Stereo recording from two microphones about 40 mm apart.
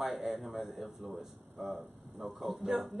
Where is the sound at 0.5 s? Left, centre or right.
Centre.